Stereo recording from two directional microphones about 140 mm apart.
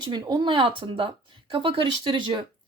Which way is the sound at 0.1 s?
30° right (ahead or behind).